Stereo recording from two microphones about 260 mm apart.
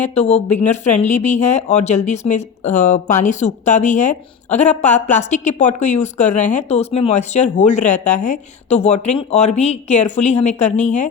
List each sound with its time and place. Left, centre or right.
0.1 s a woman's voice: left